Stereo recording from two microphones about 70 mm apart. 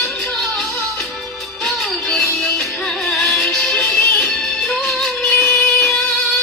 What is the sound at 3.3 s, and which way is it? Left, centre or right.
Music, centre.